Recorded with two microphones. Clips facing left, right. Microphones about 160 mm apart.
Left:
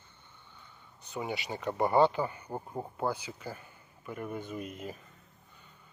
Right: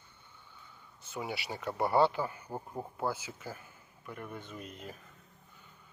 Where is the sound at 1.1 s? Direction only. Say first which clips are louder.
Left 2 dB; centre (ahead or behind).